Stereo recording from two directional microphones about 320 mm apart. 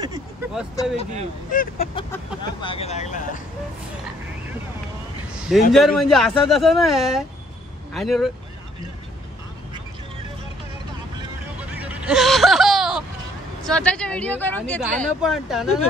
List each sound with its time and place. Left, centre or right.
0.0 s vehicle: centre
1.5 s speech: left
2.0 s speech: centre
5.7 s speech: centre
11.5 s a sound: centre
13.7 s speech: centre